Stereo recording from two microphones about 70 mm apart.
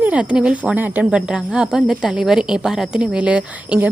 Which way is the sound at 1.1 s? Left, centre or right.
Centre.